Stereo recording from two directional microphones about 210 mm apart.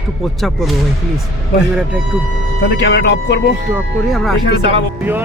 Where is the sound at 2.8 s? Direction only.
60° left (ahead or behind).